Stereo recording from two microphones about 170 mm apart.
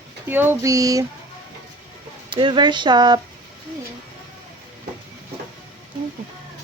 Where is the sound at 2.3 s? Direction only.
30° right (ahead or behind).